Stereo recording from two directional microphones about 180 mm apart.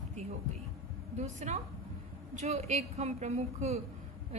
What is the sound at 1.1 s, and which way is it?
A woman's voice, 40° right (ahead or behind).